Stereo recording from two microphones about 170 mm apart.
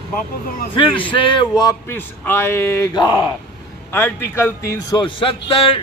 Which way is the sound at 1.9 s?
10° left (ahead or behind).